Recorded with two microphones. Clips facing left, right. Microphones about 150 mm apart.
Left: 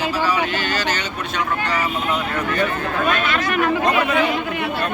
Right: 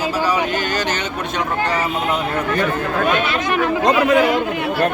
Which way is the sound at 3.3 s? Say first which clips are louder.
Right 2 dB; 20° right (ahead or behind).